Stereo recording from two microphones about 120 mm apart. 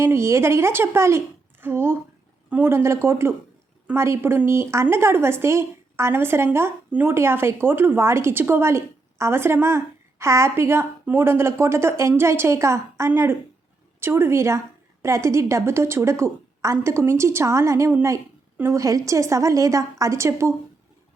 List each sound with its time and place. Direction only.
0.0 s a woman's voice: 20° right (ahead or behind)